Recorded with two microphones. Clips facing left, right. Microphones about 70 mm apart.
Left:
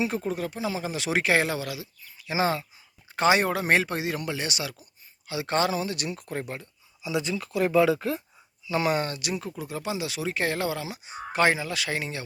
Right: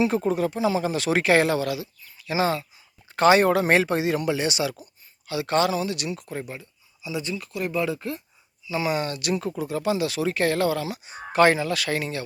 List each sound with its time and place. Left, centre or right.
0.2 s speech: centre
2.2 s speech: left
3.1 s speech: centre
5.2 s speech: left
6.5 s a sound: left
7.7 s speech: left
8.6 s speech: left
9.0 s speech: left
9.2 s speech: centre
10.4 s speech: centre